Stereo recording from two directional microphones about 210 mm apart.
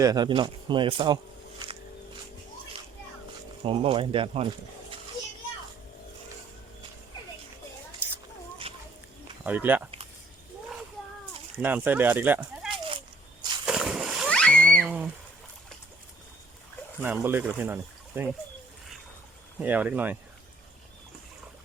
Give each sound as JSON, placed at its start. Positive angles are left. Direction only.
{"t": 0.0, "sound": "a man's voice", "side_deg": -20}
{"t": 3.6, "sound": "a man's voice", "side_deg": -25}
{"t": 8.0, "sound": "a sound", "side_deg": -10}
{"t": 8.7, "sound": "children playing", "side_deg": -25}
{"t": 9.4, "sound": "speech", "side_deg": -10}
{"t": 11.5, "sound": "speech", "side_deg": -10}
{"t": 13.7, "sound": "splash", "side_deg": -5}
{"t": 14.8, "sound": "a sound", "side_deg": -5}
{"t": 17.0, "sound": "speech", "side_deg": -10}
{"t": 19.5, "sound": "speech", "side_deg": -10}